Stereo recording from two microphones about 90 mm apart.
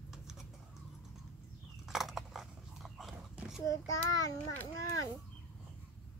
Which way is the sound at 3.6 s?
40° left (ahead or behind).